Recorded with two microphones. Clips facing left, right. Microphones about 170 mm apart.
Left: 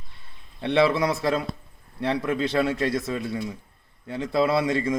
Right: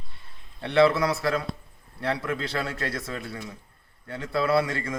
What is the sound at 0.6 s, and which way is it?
Speech, 20° left (ahead or behind).